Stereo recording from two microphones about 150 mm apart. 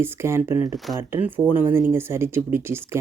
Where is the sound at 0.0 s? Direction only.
15° right (ahead or behind).